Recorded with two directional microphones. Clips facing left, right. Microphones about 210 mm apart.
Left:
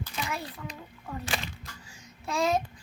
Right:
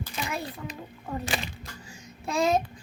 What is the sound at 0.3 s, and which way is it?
Speech, 20° right (ahead or behind).